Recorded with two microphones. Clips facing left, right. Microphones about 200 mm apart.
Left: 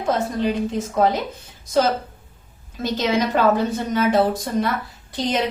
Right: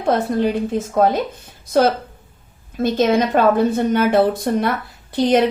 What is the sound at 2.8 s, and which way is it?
A woman's voice, 55° right (ahead or behind).